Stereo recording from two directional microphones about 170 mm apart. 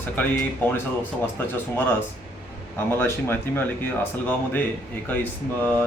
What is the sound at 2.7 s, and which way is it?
Speech, 15° left (ahead or behind).